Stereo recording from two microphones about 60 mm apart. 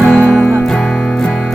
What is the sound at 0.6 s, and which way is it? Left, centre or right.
Music, centre.